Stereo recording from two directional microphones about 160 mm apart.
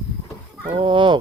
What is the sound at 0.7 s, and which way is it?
Chicken, 30° right (ahead or behind).